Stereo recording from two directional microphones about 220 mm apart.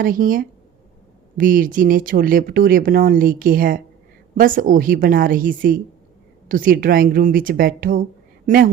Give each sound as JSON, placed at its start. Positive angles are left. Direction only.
{"t": 0.0, "sound": "speech", "side_deg": -40}